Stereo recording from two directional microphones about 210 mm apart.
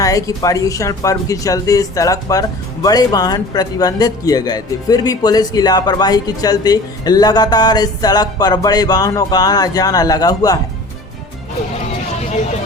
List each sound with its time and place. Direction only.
0.0 s speech: 15° left (ahead or behind)